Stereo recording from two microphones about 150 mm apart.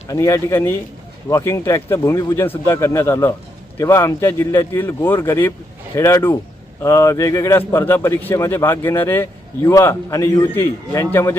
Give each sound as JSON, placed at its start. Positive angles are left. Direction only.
{"t": 0.1, "sound": "a man's voice", "side_deg": 20}